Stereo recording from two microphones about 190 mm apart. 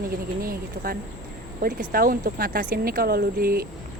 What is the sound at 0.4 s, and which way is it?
Speech, 50° right (ahead or behind).